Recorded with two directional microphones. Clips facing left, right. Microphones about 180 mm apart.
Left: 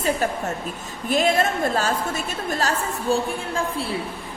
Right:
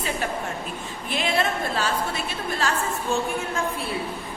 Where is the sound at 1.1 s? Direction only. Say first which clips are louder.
Left 5 dB; 45° left (ahead or behind).